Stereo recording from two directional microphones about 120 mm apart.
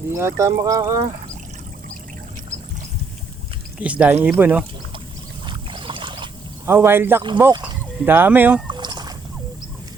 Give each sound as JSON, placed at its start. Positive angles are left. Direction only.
{"t": 0.1, "sound": "speech", "side_deg": -20}
{"t": 3.8, "sound": "speech", "side_deg": -10}
{"t": 5.5, "sound": "boat", "side_deg": -45}
{"t": 6.7, "sound": "speech", "side_deg": -20}
{"t": 8.7, "sound": "fowl", "side_deg": -40}